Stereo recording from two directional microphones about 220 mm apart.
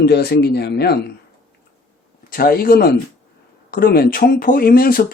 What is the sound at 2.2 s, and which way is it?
Speech, 40° left (ahead or behind).